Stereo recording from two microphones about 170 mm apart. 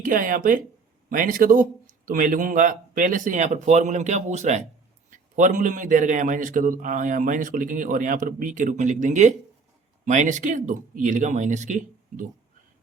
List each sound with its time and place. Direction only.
0.0 s a man's voice: 55° right (ahead or behind)